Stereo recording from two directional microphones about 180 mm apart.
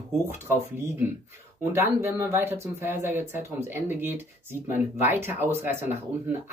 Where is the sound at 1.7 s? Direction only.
15° right (ahead or behind).